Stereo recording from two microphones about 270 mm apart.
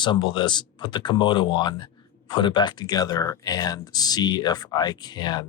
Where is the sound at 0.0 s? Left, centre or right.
Centre.